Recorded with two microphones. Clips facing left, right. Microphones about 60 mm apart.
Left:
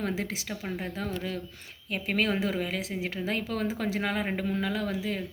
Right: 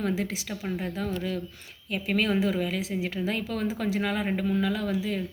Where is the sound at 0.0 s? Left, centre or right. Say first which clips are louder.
Right 3 dB; left.